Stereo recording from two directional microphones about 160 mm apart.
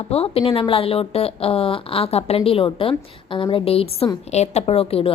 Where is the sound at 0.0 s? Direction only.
40° left (ahead or behind).